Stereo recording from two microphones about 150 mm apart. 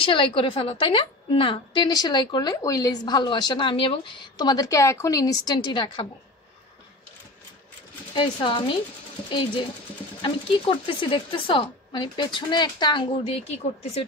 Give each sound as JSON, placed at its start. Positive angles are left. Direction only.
{"t": 0.0, "sound": "a woman's voice", "side_deg": 35}
{"t": 8.1, "sound": "a woman's voice", "side_deg": 30}